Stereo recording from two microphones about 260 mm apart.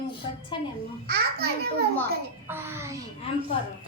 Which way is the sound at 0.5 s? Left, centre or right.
Centre.